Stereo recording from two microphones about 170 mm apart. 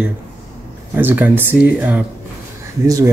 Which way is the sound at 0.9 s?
10° right (ahead or behind).